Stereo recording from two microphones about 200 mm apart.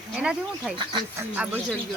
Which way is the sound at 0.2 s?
5° right (ahead or behind).